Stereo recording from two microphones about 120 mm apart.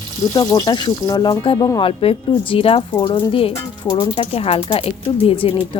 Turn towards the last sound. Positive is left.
turn(degrees=50)  # may be behind; listen again after turning